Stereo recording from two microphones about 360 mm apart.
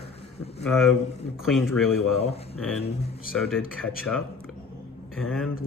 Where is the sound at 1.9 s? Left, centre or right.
Left.